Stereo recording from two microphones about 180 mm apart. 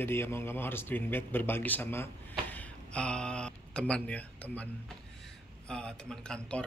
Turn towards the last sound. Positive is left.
turn(degrees=5)  # may be behind; listen again after turning